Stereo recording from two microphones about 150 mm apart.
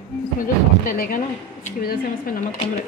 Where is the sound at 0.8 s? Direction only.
75° left (ahead or behind).